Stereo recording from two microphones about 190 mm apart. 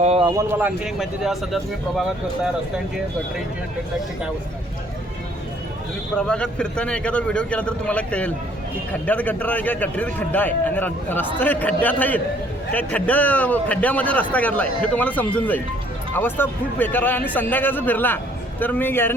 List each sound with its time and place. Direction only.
0.0 s a sound: 35° right (ahead or behind)
0.3 s speech: 15° right (ahead or behind)
0.9 s a man's voice: 5° right (ahead or behind)
6.1 s a man's voice: 5° left (ahead or behind)